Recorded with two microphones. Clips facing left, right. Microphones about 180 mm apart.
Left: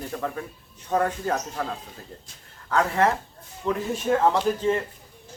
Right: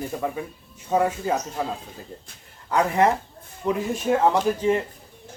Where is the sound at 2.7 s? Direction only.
15° right (ahead or behind).